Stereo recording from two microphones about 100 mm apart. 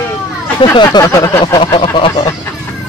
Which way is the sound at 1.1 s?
35° left (ahead or behind).